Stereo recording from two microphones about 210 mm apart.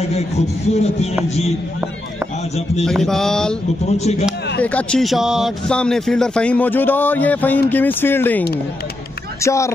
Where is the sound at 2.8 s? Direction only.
Centre (ahead or behind).